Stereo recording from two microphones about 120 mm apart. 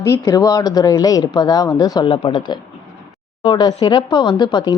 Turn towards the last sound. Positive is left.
turn(degrees=40)  # may be behind; listen again after turning